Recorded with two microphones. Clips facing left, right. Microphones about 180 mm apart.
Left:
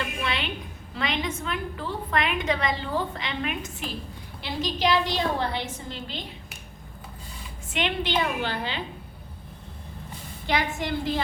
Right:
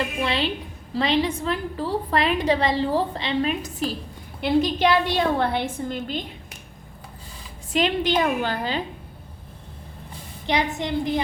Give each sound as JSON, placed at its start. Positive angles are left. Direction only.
{"t": 0.0, "sound": "a sound", "side_deg": -30}
{"t": 0.9, "sound": "a woman's voice", "side_deg": -30}
{"t": 4.4, "sound": "a woman's voice", "side_deg": -55}
{"t": 7.7, "sound": "a woman's voice", "side_deg": -40}
{"t": 10.4, "sound": "a woman's voice", "side_deg": -20}